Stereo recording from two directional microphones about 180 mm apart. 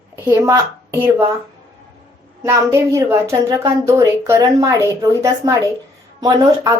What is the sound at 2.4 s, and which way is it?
A woman's voice, 15° right (ahead or behind).